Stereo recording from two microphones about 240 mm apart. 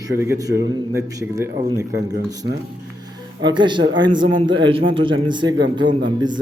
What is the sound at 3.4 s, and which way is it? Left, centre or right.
A man's voice, centre.